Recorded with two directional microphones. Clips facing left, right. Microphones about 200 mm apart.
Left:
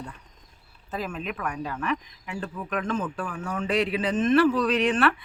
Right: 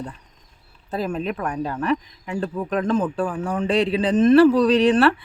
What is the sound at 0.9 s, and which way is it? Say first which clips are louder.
Speech: right 7 dB; 35° right (ahead or behind).